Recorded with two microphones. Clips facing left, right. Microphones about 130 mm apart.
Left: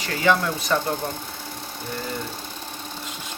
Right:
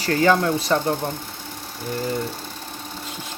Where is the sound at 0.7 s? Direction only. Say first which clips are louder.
Right 1 dB; 25° right (ahead or behind).